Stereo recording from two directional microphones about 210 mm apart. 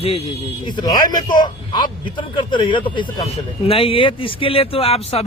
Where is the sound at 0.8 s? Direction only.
20° left (ahead or behind).